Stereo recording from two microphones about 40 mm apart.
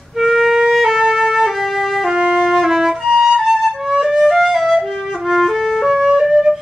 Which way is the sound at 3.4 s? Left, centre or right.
Centre.